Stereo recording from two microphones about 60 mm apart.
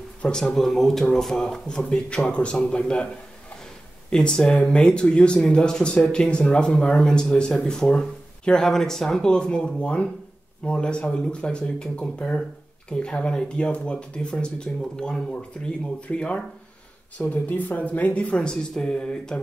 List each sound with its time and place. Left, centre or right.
0.2 s speech: centre
4.1 s speech: centre
17.2 s speech: left; by 19.4 s centre